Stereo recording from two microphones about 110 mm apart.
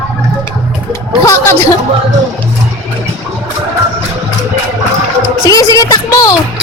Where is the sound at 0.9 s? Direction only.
30° left (ahead or behind).